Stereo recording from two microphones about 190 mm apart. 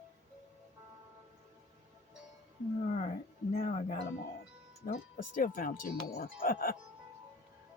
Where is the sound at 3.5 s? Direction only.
45° left (ahead or behind).